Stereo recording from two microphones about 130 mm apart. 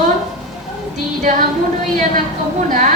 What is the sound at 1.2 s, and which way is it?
Speech, 75° right (ahead or behind).